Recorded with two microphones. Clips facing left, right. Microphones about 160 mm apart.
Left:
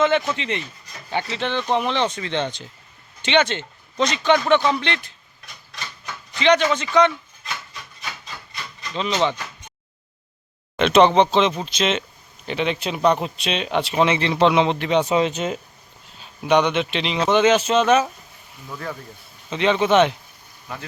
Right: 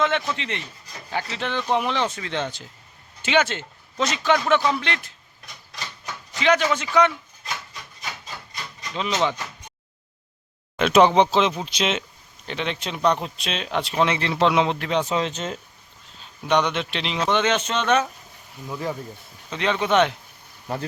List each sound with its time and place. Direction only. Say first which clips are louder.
0.0 s speech: left 4 dB; centre (ahead or behind)
6.4 s speech: left 3 dB; 5° right (ahead or behind)
9.0 s speech: left 2 dB; 5° right (ahead or behind)
10.8 s speech: left 1 dB; 5° right (ahead or behind)
12.5 s speech: left 5 dB; 5° left (ahead or behind)
18.7 s speech: right 3 dB; 15° right (ahead or behind)
19.5 s speech: left 4 dB; centre (ahead or behind)